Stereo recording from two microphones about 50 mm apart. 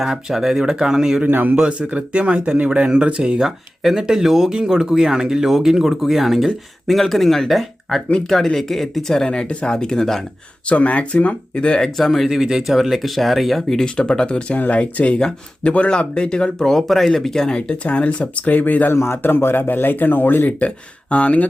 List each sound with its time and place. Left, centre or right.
0.0 s speech: centre
1.3 s a man's voice: right
1.5 s speech: centre
3.4 s speech: centre
10.7 s speech: left
11.9 s speech: centre
13.8 s speech: centre
17.8 s speech: left
18.9 s speech: left
20.6 s speech: left